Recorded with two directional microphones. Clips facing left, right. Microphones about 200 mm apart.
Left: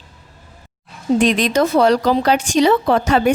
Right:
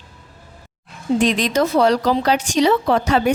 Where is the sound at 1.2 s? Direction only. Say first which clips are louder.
Left 1 dB; 60° left (ahead or behind).